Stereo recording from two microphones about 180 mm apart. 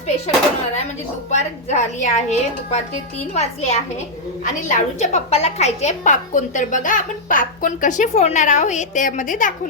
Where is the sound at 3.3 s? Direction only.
35° left (ahead or behind).